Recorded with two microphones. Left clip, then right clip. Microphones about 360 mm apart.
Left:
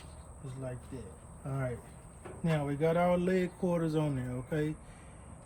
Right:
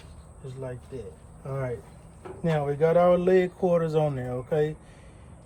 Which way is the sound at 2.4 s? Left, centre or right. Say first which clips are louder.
Right 8 dB; right.